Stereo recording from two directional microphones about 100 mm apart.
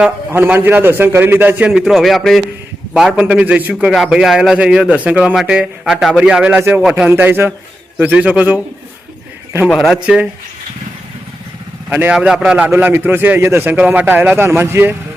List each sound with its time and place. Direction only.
0.3 s a man's voice: 20° right (ahead or behind)
1.8 s a man's voice: centre (ahead or behind)
3.2 s a man's voice: 15° right (ahead or behind)
3.9 s a man's voice: 5° right (ahead or behind)
6.6 s a man's voice: 20° right (ahead or behind)
9.6 s a man's voice: centre (ahead or behind)
11.9 s a man's voice: 20° right (ahead or behind)
12.1 s a man's voice: 5° right (ahead or behind); by 14.9 s 25° right (ahead or behind)